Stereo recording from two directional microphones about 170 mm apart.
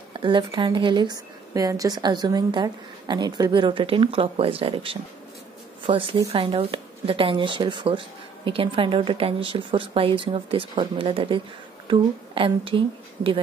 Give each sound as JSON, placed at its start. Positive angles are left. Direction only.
{"t": 0.2, "sound": "a woman's voice", "side_deg": -30}